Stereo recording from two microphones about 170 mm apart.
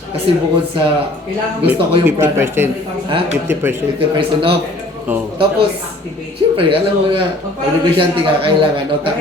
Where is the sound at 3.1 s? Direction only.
30° right (ahead or behind).